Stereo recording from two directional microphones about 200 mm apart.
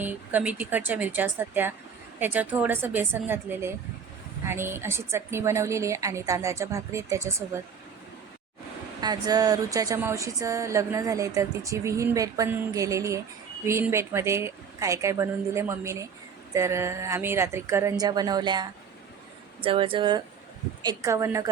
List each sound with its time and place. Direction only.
0.0 s speech: 10° right (ahead or behind)
9.0 s speech: 20° right (ahead or behind)